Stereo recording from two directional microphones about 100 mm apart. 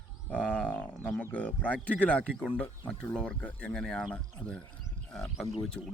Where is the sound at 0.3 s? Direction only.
15° left (ahead or behind).